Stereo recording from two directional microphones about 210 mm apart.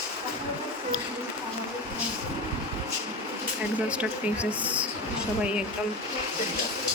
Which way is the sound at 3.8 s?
5° right (ahead or behind).